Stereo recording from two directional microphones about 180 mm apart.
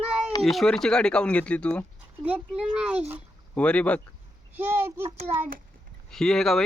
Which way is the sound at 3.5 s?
5° left (ahead or behind).